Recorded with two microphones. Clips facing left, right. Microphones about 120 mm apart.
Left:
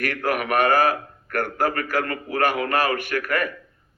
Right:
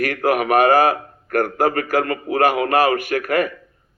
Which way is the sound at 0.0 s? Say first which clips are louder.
Right 6 dB; 45° right (ahead or behind).